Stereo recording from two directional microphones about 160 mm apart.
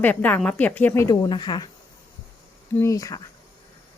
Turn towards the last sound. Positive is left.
turn(degrees=20)  # may be behind; listen again after turning